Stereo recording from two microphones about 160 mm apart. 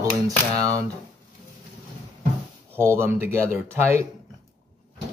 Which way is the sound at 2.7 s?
15° right (ahead or behind).